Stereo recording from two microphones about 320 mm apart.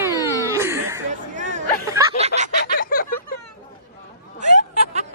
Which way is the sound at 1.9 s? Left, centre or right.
Centre.